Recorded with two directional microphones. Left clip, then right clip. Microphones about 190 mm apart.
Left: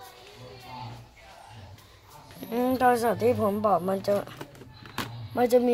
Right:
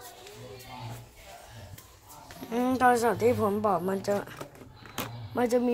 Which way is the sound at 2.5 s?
10° left (ahead or behind).